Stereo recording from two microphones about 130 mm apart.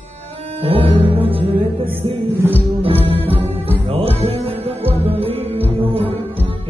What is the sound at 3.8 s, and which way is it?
Music, 50° right (ahead or behind).